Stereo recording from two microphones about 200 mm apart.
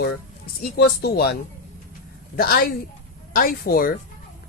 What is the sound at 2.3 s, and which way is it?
A woman's voice, 50° left (ahead or behind).